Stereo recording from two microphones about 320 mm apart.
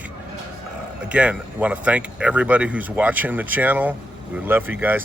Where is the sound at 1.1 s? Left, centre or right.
Centre.